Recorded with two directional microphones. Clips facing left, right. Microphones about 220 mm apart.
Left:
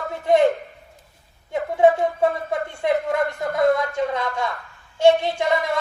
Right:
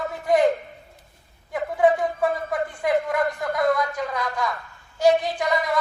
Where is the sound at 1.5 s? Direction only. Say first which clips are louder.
Left 3 dB; 25° left (ahead or behind).